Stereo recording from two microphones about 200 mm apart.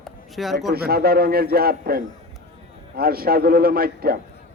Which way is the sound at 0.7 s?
50° right (ahead or behind).